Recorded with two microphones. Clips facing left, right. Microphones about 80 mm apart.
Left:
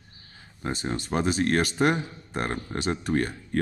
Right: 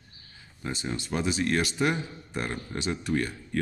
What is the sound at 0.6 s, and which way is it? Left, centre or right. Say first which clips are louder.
Speech: left 3 dB; left.